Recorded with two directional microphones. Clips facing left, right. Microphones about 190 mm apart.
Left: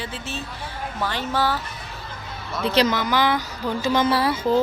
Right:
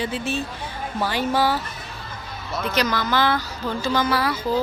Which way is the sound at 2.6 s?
30° left (ahead or behind).